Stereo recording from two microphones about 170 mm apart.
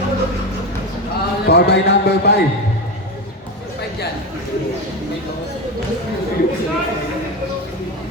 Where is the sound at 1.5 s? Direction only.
75° left (ahead or behind).